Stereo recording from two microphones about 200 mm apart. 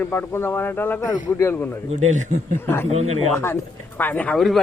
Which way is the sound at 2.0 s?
35° right (ahead or behind).